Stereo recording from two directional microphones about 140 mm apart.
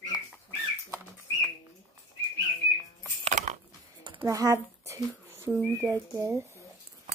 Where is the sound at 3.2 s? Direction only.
60° right (ahead or behind).